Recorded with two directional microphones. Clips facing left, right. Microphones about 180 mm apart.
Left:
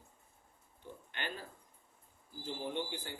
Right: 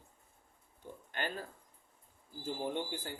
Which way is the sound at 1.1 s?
45° right (ahead or behind).